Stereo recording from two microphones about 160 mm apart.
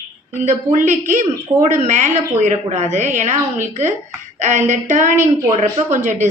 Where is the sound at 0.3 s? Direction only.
50° right (ahead or behind).